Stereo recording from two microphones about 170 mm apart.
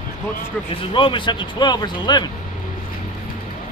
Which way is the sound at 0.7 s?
30° left (ahead or behind).